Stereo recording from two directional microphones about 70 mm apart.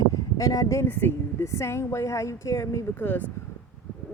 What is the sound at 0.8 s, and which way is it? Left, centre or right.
Speech, left.